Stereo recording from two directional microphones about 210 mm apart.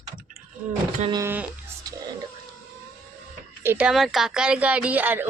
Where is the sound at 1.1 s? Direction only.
10° right (ahead or behind).